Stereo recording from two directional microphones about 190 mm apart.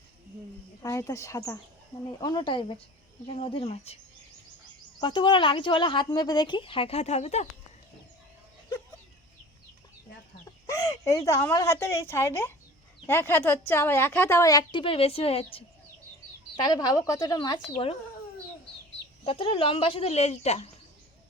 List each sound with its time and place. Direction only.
0.8 s a woman's voice: 15° left (ahead or behind); by 3.9 s 30° left (ahead or behind)
4.9 s speech: 25° left (ahead or behind)
10.7 s a woman's voice: 15° left (ahead or behind); by 15.4 s 30° left (ahead or behind)
16.6 s speech: 20° left (ahead or behind)
19.2 s speech: 30° left (ahead or behind)